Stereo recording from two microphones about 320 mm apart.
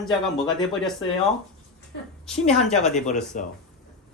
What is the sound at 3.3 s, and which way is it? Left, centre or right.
Speech, left.